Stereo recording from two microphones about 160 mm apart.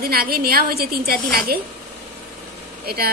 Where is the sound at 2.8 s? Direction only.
75° right (ahead or behind).